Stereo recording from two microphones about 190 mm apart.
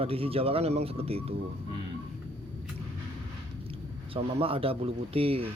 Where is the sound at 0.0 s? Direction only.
30° right (ahead or behind).